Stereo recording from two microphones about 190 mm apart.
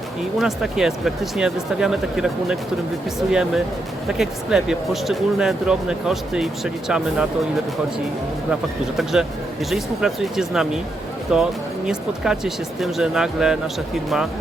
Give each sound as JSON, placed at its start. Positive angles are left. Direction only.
{"t": 0.3, "sound": "speech", "side_deg": 0}
{"t": 9.6, "sound": "speech", "side_deg": 0}